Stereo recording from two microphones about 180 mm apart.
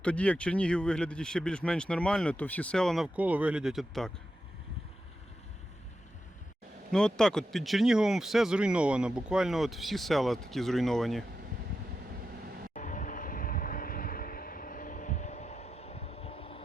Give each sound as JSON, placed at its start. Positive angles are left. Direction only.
{"t": 0.0, "sound": "speech", "side_deg": 5}
{"t": 6.9, "sound": "speech", "side_deg": 5}
{"t": 12.7, "sound": "vehicle", "side_deg": 45}